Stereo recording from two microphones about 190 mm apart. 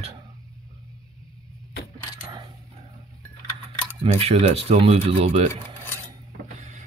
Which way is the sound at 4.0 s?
30° right (ahead or behind).